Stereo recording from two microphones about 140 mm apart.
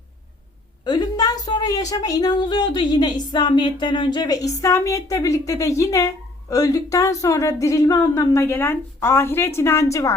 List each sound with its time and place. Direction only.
0.9 s a woman's voice: 30° left (ahead or behind)